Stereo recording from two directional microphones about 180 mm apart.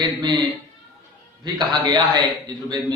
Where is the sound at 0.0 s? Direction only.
25° right (ahead or behind).